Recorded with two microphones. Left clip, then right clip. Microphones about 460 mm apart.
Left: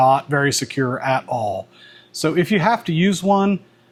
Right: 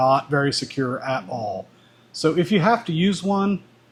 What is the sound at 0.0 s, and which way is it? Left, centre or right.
Speech, left.